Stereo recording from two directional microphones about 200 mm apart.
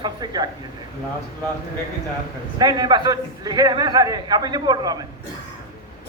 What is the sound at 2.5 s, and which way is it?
A man's voice, 20° right (ahead or behind).